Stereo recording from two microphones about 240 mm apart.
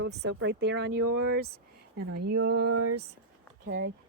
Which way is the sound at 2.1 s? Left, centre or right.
Right.